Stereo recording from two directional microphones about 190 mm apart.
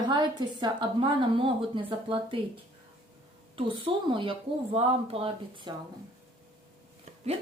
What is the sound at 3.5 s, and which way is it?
A woman's voice, 25° right (ahead or behind).